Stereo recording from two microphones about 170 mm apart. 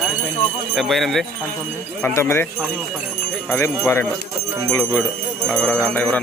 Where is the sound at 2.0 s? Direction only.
10° left (ahead or behind).